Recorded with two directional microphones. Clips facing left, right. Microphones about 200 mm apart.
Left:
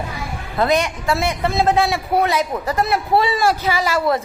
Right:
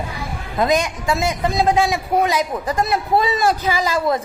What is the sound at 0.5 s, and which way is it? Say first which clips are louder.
A man's voice: even; 15° right (ahead or behind).